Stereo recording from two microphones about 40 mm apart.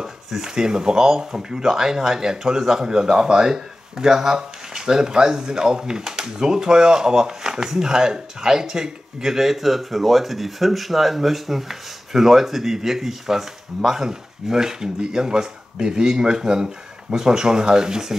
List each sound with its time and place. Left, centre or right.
0.0 s speech: centre